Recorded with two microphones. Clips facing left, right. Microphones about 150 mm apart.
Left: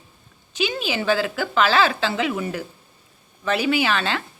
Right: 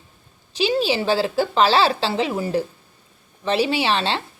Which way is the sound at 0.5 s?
30° right (ahead or behind).